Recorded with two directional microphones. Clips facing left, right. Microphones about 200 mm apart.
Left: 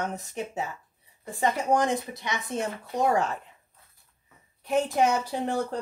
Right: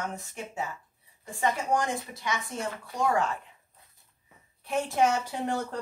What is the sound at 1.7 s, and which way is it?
Speech, 20° left (ahead or behind).